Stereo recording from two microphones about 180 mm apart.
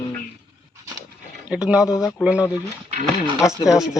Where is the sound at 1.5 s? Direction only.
5° right (ahead or behind).